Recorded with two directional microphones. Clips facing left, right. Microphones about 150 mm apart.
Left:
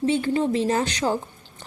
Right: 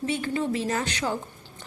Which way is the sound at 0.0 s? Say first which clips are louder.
Left 6 dB; 30° left (ahead or behind).